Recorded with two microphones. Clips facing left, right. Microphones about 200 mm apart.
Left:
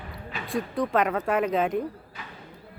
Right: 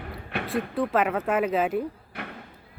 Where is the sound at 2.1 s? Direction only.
65° right (ahead or behind).